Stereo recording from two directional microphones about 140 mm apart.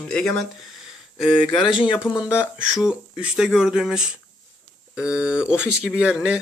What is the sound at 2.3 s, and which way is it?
Speech, 10° right (ahead or behind).